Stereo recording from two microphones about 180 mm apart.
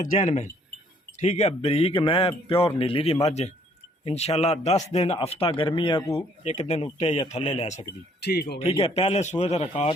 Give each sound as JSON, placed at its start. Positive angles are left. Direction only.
{"t": 0.0, "sound": "speech", "side_deg": 45}
{"t": 6.1, "sound": "speech", "side_deg": 40}
{"t": 8.2, "sound": "speech", "side_deg": 65}
{"t": 8.8, "sound": "speech", "side_deg": 35}